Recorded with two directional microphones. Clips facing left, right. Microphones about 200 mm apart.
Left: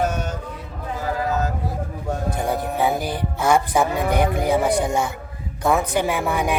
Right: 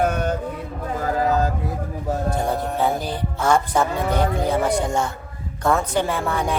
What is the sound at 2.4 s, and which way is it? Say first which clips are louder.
Speech: left 3 dB; 10° left (ahead or behind).